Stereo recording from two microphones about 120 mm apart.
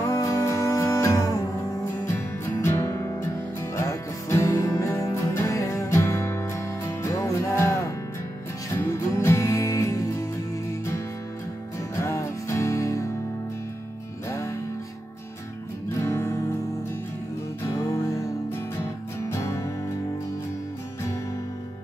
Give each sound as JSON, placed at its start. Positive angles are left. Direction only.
{"t": 0.0, "sound": "music", "side_deg": 25}
{"t": 12.0, "sound": "music", "side_deg": 25}
{"t": 16.0, "sound": "music", "side_deg": 20}
{"t": 17.6, "sound": "music", "side_deg": 25}